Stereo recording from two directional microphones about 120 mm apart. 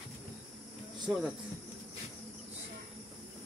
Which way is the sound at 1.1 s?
10° right (ahead or behind).